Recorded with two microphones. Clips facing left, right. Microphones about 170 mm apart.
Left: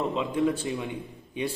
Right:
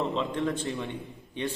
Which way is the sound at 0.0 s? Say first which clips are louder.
Left 3 dB; 5° left (ahead or behind).